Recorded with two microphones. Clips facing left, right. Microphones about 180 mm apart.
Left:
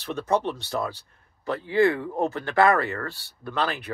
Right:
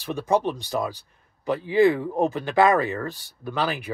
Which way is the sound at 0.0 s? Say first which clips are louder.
Right 2 dB; 10° right (ahead or behind).